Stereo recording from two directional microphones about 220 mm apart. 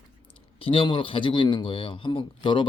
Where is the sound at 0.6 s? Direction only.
25° left (ahead or behind).